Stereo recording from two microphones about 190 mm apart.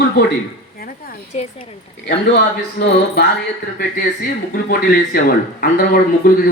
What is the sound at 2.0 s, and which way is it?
Speech, 60° left (ahead or behind).